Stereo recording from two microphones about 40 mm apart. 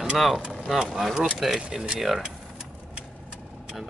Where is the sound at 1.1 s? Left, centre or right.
Centre.